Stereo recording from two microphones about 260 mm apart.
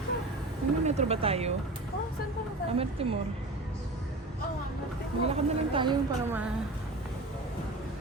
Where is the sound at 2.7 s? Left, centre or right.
Right.